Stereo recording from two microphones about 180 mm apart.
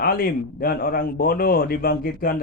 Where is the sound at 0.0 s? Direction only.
55° left (ahead or behind).